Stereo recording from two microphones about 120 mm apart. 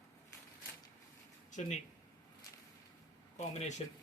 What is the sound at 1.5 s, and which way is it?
Speech, 85° left.